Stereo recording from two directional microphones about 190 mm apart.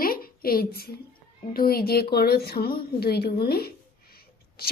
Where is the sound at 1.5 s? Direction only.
50° left (ahead or behind).